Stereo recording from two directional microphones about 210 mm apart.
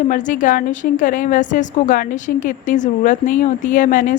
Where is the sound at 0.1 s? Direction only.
40° left (ahead or behind).